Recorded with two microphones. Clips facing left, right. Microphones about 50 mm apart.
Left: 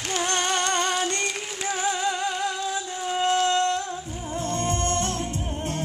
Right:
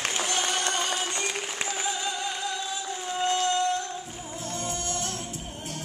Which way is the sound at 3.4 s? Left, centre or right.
Left.